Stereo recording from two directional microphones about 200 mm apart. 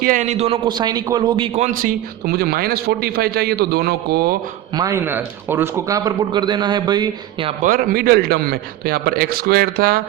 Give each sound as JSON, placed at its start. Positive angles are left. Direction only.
{"t": 0.0, "sound": "a man's voice", "side_deg": -40}
{"t": 1.5, "sound": "a man's voice", "side_deg": -40}
{"t": 4.8, "sound": "a man's voice", "side_deg": -15}
{"t": 7.6, "sound": "a man's voice", "side_deg": -45}